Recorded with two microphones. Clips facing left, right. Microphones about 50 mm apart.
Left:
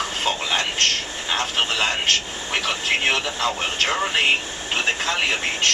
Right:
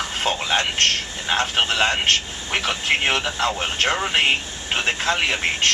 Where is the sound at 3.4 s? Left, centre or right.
Right.